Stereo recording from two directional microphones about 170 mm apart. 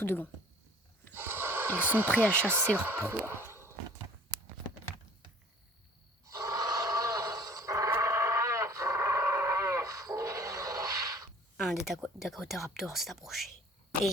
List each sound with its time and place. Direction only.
0.0 s speech: 10° left (ahead or behind)
1.1 s snort: 10° right (ahead or behind)
2.1 s speech: 10° right (ahead or behind)
6.2 s a sound: 20° right (ahead or behind)
11.5 s a sound: centre (ahead or behind)
11.9 s speech: centre (ahead or behind)